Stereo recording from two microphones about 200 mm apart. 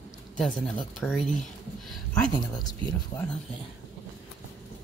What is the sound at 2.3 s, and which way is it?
Speech, 20° left (ahead or behind).